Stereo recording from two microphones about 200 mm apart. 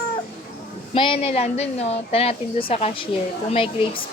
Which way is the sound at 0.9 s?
25° left (ahead or behind).